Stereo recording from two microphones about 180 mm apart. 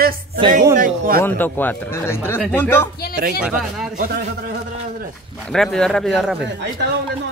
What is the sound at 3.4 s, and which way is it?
Speech, 5° right (ahead or behind).